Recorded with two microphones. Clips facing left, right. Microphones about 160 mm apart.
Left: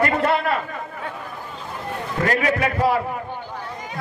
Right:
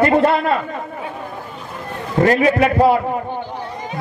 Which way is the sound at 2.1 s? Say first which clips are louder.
Right 8 dB; 25° right (ahead or behind).